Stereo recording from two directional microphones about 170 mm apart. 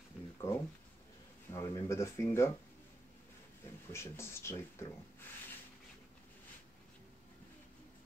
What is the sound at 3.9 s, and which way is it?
Speech, 15° left (ahead or behind).